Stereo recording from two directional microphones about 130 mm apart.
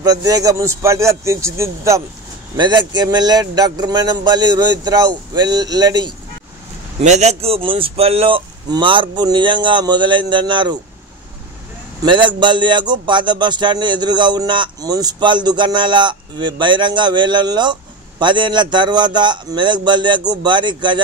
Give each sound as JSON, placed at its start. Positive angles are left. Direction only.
{"t": 0.0, "sound": "speech", "side_deg": -30}
{"t": 2.5, "sound": "a man's voice", "side_deg": -35}
{"t": 7.0, "sound": "speech", "side_deg": -60}
{"t": 8.6, "sound": "a man's voice", "side_deg": -35}
{"t": 12.0, "sound": "a man's voice", "side_deg": -35}